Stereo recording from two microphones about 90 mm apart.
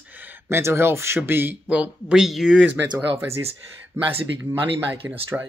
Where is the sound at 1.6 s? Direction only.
15° right (ahead or behind).